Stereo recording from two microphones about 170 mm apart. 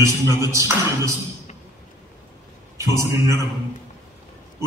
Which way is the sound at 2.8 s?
20° right (ahead or behind).